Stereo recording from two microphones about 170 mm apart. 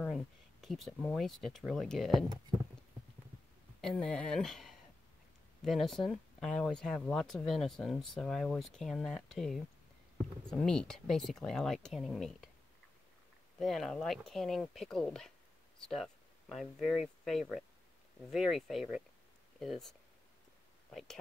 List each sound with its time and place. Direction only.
0.0 s speech: centre (ahead or behind)
3.8 s speech: 5° left (ahead or behind)
13.6 s speech: centre (ahead or behind)